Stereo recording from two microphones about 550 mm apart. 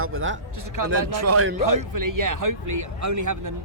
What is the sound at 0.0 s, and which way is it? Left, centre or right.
A man's voice, right.